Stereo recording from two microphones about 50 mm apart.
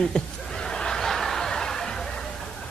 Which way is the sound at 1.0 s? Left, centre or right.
Centre.